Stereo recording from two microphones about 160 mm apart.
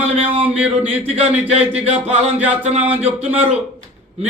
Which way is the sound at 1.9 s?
40° right (ahead or behind).